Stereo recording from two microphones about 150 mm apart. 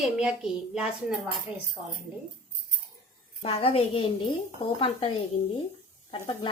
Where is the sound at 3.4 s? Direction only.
40° left (ahead or behind).